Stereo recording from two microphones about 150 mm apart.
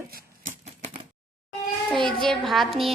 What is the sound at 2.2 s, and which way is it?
Speech, centre (ahead or behind).